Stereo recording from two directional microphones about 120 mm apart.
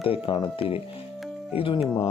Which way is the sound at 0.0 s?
50° left (ahead or behind).